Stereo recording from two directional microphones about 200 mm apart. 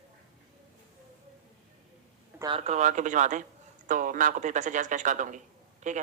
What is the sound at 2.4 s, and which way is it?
A man's voice, 30° right (ahead or behind).